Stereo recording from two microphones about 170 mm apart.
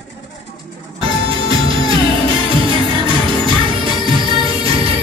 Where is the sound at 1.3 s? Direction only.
30° right (ahead or behind).